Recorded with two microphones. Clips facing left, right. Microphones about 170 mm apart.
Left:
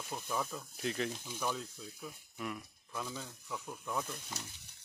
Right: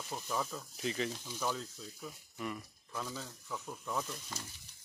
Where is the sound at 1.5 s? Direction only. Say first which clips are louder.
Even; 5° left (ahead or behind).